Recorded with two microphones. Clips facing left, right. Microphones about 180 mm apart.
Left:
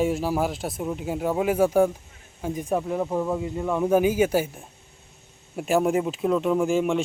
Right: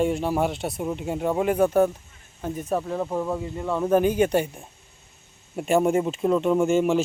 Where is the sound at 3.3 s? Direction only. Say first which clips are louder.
Left 1 dB; 15° left (ahead or behind).